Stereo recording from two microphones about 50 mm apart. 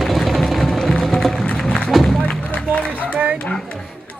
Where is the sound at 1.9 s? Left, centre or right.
Centre.